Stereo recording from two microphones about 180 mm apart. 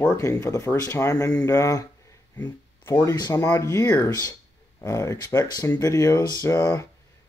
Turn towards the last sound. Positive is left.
turn(degrees=15)  # may be behind; listen again after turning